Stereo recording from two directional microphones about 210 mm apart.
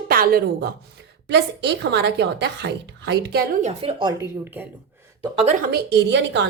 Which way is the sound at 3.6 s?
30° right (ahead or behind).